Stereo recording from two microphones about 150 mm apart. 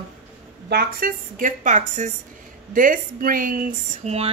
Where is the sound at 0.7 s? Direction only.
85° right; by 2.1 s 55° right (ahead or behind).